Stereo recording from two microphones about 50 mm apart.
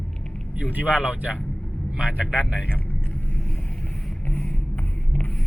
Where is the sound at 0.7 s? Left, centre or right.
Right.